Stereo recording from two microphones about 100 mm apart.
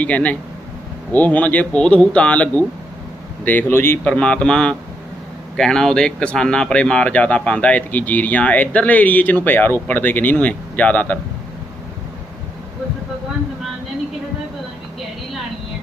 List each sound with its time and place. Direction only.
0.0 s speech: 15° left (ahead or behind)